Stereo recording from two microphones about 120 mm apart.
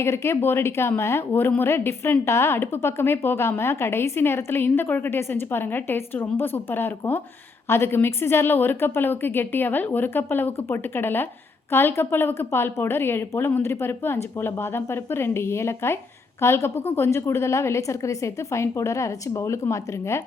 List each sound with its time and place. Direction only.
0.0 s a woman's voice: 20° left (ahead or behind)